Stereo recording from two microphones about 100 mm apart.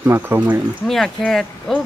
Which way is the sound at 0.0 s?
20° right (ahead or behind).